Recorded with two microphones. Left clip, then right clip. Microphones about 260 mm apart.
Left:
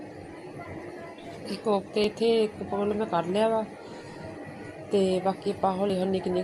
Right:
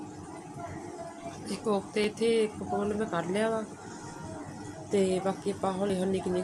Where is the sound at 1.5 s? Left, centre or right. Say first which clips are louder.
Left 4 dB; centre.